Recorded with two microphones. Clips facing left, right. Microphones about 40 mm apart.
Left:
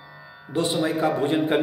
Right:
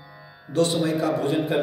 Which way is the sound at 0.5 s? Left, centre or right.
Left.